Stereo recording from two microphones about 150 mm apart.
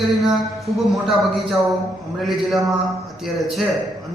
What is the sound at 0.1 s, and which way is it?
Speech, centre (ahead or behind).